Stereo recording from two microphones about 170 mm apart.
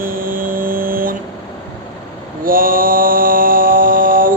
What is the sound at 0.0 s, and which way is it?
Vehicle, 55° right (ahead or behind).